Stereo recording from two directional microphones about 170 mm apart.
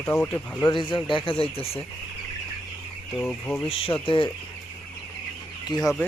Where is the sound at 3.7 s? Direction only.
35° left (ahead or behind).